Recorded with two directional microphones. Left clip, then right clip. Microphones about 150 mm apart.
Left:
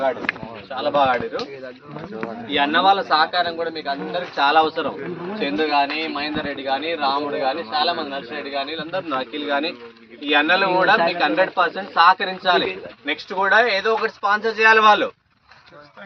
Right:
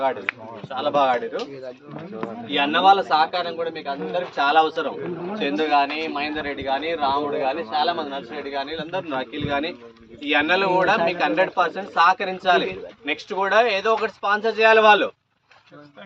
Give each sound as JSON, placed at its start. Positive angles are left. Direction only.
{"t": 0.7, "sound": "a man's voice", "side_deg": 0}
{"t": 2.5, "sound": "a man's voice", "side_deg": -5}
{"t": 14.0, "sound": "speech", "side_deg": -30}